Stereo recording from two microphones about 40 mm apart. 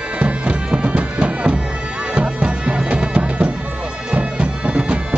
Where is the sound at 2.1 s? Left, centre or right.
Right.